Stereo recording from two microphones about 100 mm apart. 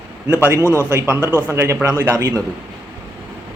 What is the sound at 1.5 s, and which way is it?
Speech, 30° right (ahead or behind).